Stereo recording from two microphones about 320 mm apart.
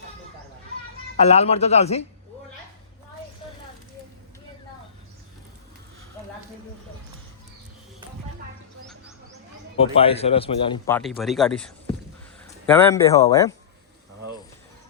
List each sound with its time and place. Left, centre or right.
1.2 s speech: centre
9.7 s a man's voice: centre